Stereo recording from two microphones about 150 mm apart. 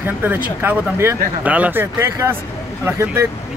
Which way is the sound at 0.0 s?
15° right (ahead or behind).